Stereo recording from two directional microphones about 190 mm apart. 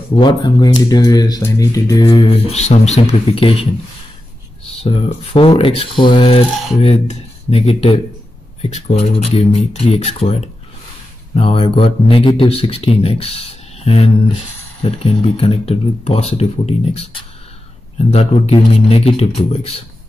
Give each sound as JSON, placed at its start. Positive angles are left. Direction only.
{"t": 0.2, "sound": "speech", "side_deg": 25}
{"t": 4.8, "sound": "speech", "side_deg": 30}